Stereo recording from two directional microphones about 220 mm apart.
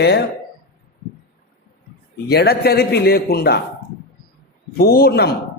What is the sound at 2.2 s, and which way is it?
Speech, 45° left (ahead or behind).